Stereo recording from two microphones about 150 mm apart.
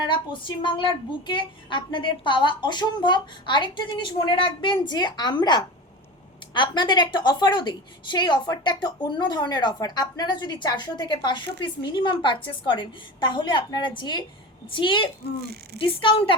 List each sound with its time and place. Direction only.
0.0 s a woman's voice: 30° left (ahead or behind)
15.4 s speech: 90° right
15.8 s a woman's voice: 35° left (ahead or behind)